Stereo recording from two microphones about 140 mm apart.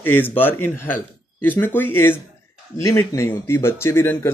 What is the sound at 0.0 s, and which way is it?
Speech, 15° left (ahead or behind).